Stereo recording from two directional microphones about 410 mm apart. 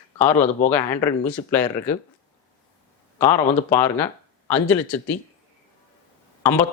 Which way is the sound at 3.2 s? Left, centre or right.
Centre.